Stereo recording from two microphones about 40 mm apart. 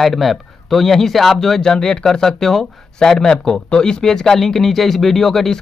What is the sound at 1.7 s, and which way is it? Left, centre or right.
Speech, centre.